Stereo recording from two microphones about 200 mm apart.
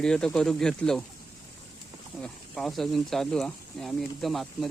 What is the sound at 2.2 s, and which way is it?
Speech, centre (ahead or behind).